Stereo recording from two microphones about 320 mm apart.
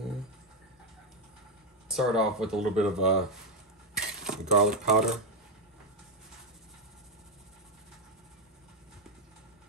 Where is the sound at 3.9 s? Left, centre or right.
Centre.